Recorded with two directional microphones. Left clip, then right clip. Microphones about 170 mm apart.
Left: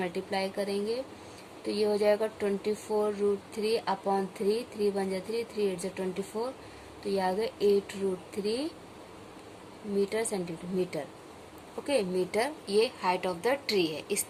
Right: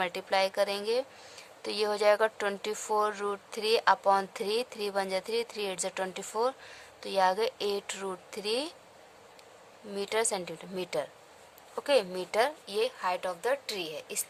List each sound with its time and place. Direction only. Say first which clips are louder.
0.0 s a woman's voice: right 4 dB; 60° right (ahead or behind)
10.0 s a woman's voice: even; 60° right (ahead or behind)